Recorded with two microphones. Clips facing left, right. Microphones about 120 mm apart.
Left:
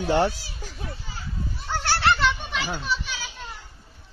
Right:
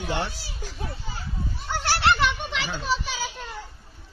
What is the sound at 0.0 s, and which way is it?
Speech, 40° left (ahead or behind).